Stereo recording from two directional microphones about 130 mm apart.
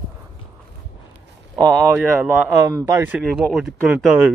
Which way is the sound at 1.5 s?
30° right (ahead or behind).